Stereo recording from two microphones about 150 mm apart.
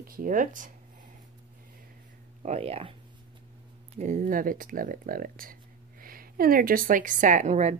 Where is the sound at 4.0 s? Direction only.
60° right (ahead or behind).